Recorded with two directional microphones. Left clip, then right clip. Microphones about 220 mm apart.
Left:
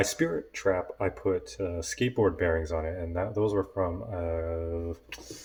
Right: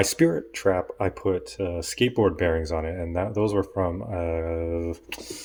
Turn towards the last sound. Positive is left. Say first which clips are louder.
# right 6 dB
turn(degrees=-40)  # may be behind; listen again after turning